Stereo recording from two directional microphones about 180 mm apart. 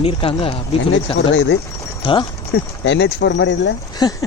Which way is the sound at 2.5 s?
75° left (ahead or behind).